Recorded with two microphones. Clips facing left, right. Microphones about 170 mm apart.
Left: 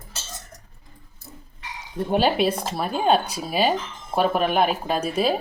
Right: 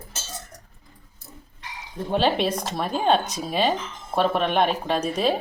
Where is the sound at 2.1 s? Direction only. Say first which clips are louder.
Left 1 dB; 10° left (ahead or behind).